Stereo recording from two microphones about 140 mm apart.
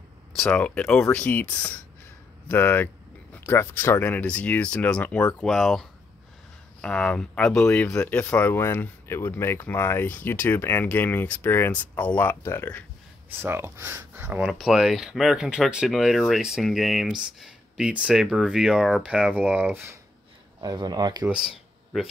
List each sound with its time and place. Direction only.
0.4 s speech: 10° left (ahead or behind)
13.3 s speech: 15° right (ahead or behind)
20.6 s speech: 30° right (ahead or behind)
21.3 s a sound: 5° right (ahead or behind)